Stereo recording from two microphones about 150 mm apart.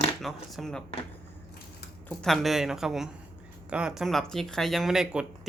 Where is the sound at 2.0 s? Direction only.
Centre (ahead or behind).